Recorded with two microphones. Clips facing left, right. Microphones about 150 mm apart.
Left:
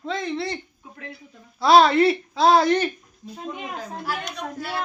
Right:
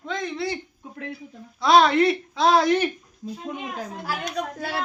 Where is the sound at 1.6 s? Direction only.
Centre (ahead or behind).